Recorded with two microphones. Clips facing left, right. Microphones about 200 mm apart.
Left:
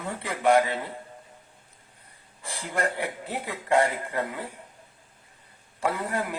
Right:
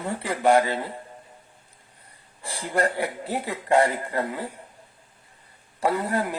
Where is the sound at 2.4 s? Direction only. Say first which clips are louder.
Right 4 dB; 35° right (ahead or behind).